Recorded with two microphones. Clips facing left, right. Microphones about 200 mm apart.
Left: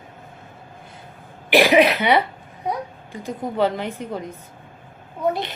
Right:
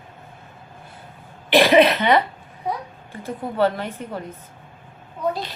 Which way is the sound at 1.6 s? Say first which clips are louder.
Right 1 dB; 10° left (ahead or behind).